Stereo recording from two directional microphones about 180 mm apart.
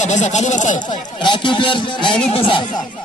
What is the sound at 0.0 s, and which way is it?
Speech, 40° left (ahead or behind).